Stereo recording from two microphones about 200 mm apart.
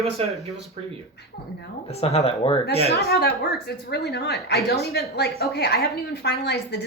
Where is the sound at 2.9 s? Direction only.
55° left (ahead or behind).